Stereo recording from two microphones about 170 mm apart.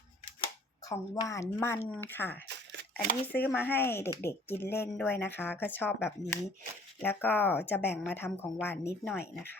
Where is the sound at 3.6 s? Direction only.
10° left (ahead or behind).